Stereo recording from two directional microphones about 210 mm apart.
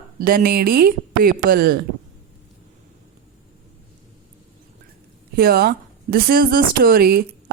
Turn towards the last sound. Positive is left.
turn(degrees=-45)  # may be behind; listen again after turning